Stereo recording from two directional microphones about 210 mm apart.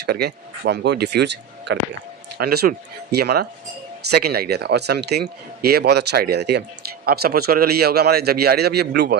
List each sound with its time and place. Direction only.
0.0 s a man's voice: 50° right (ahead or behind)